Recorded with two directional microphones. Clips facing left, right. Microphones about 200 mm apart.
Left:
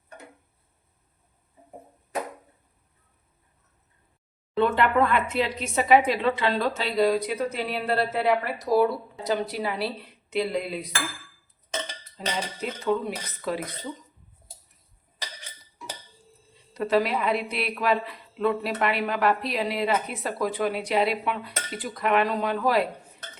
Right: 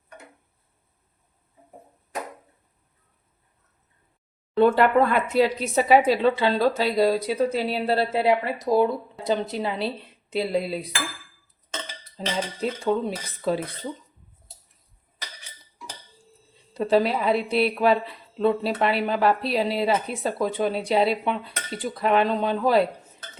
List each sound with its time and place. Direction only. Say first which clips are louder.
4.5 s a woman's voice: right 4 dB; 40° right (ahead or behind)
12.1 s speech: right 3 dB; 30° right (ahead or behind)
16.7 s a woman's voice: right 3 dB; 30° right (ahead or behind)